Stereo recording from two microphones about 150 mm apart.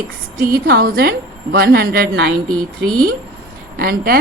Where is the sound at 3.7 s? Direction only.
85° right.